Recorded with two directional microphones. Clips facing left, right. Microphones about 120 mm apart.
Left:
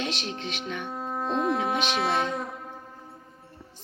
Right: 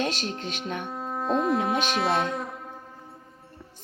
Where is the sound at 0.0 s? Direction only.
40° right (ahead or behind).